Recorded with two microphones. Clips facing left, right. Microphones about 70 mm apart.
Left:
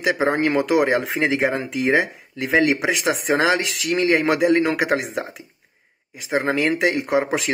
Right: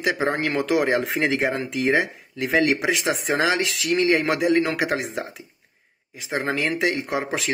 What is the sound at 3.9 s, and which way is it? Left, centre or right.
Speech, left.